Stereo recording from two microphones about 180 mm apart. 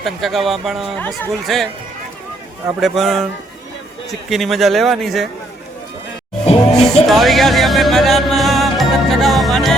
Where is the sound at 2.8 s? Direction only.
Centre (ahead or behind).